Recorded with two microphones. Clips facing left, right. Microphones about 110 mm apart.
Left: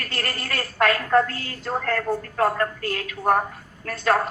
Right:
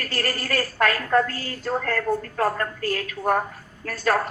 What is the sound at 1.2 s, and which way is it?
Speech, 35° right (ahead or behind).